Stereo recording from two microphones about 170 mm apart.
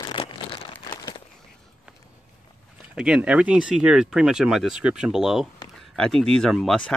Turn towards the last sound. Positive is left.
turn(degrees=5)  # may be behind; listen again after turning